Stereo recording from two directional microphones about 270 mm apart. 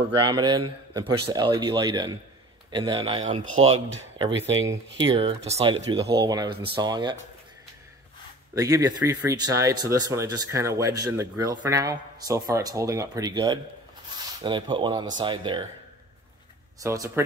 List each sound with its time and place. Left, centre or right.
0.1 s speech: centre
8.5 s speech: centre
16.8 s speech: centre